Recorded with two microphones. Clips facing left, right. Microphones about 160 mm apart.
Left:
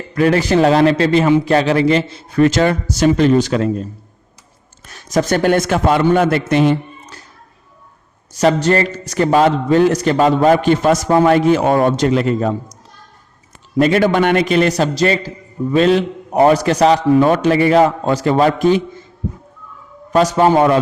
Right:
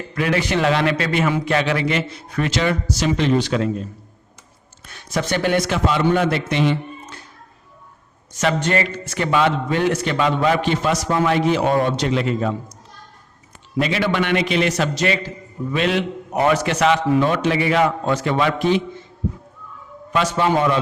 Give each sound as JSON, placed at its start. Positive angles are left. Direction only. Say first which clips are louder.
{"t": 0.1, "sound": "a man's voice", "louder": "left 7 dB", "side_deg": 40}
{"t": 2.5, "sound": "a man's voice", "louder": "left 5 dB", "side_deg": 45}
{"t": 4.9, "sound": "a man's voice", "louder": "left 7 dB", "side_deg": 40}
{"t": 8.4, "sound": "a man's voice", "louder": "left 6 dB", "side_deg": 35}
{"t": 13.7, "sound": "a man's voice", "louder": "left 7 dB", "side_deg": 45}
{"t": 20.1, "sound": "a man's voice", "louder": "left 7 dB", "side_deg": 40}